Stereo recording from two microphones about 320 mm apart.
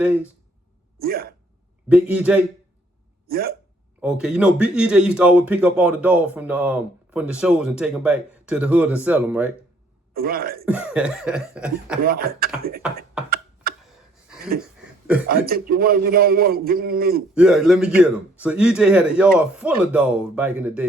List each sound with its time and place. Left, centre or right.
0.0 s speech: centre
0.9 s speech: right
1.9 s speech: centre
3.2 s speech: right
4.0 s speech: centre
10.2 s a man's voice: right
10.7 s speech: centre
12.0 s a man's voice: right
15.3 s a man's voice: right
17.3 s speech: centre